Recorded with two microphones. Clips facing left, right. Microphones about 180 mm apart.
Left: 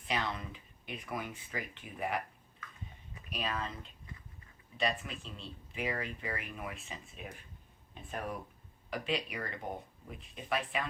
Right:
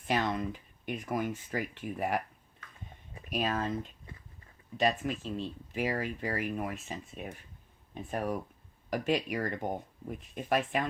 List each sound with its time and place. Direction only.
0.0 s speech: 45° right (ahead or behind)
3.2 s speech: 45° right (ahead or behind)
4.8 s speech: 45° right (ahead or behind)